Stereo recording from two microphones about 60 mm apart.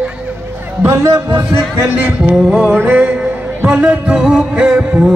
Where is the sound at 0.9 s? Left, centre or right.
Right.